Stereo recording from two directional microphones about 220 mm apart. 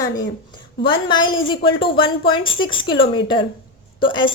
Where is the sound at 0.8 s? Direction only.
20° left (ahead or behind).